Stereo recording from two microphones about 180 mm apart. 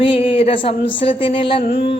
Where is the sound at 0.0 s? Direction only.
30° left (ahead or behind).